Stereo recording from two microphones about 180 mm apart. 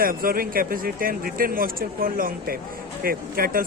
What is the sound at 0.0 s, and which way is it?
Speech, 55° right (ahead or behind).